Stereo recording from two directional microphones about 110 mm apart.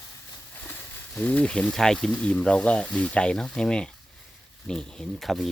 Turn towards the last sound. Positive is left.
turn(degrees=0)  # may be behind; listen again after turning